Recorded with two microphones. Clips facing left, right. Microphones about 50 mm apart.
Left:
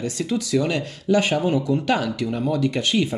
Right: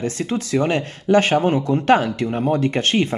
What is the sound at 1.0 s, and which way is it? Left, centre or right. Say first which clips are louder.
Speech: right 4 dB; right.